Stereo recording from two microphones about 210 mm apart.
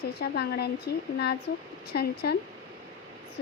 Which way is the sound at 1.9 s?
50° left (ahead or behind).